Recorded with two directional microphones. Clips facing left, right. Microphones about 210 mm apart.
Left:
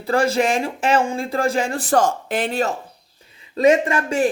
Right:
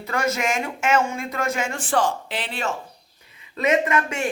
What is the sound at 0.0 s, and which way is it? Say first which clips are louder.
Speech: left 6 dB; 30° left (ahead or behind).